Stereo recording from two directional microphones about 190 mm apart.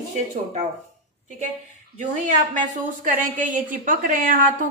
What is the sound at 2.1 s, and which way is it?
A woman's voice, 40° right (ahead or behind).